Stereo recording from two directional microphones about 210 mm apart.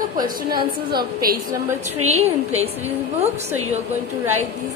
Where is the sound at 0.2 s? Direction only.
40° right (ahead or behind).